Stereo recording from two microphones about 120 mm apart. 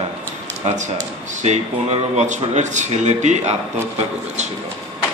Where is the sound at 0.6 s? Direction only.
85° right.